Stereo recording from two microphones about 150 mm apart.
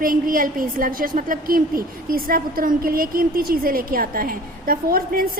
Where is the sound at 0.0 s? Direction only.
70° right (ahead or behind).